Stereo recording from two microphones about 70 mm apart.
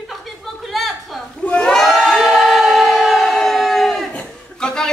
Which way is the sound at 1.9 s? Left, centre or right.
Centre.